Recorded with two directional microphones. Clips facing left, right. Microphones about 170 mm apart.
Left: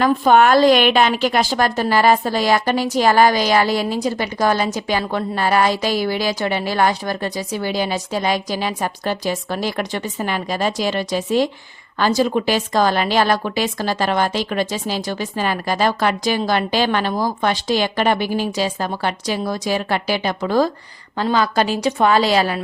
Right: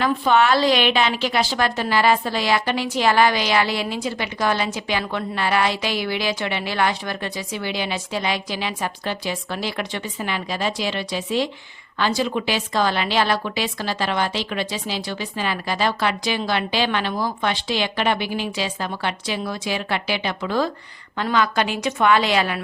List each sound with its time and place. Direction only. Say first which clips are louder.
0.0 s a woman's voice: left 5 dB; 45° left (ahead or behind)